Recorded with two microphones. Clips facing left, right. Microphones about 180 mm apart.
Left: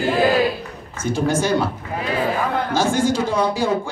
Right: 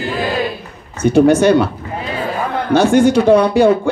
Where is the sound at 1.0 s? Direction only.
65° right (ahead or behind).